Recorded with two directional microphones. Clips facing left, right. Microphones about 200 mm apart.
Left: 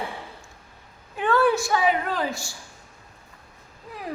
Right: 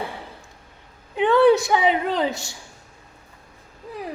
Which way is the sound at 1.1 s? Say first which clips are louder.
Right 6 dB; 20° right (ahead or behind).